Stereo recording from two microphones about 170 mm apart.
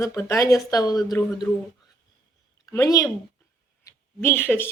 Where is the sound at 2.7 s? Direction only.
20° left (ahead or behind).